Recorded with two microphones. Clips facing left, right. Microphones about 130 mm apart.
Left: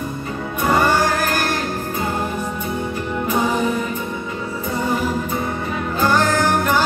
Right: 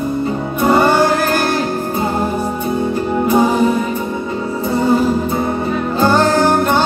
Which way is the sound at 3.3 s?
35° right (ahead or behind).